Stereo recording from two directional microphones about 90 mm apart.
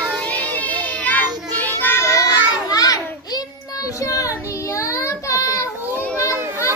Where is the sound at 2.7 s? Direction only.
45° left (ahead or behind).